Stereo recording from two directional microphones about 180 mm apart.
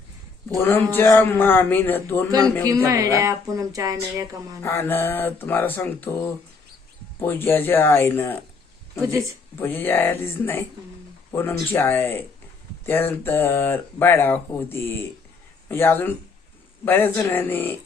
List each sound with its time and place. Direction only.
0.6 s speech: 10° left (ahead or behind)
2.6 s a woman's voice: 20° right (ahead or behind)
4.6 s speech: 10° left (ahead or behind)
7.2 s speech: 10° left (ahead or behind)
9.6 s speech: 10° left (ahead or behind)